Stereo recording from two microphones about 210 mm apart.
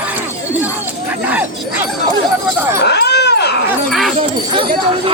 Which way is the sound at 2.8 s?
55° left (ahead or behind).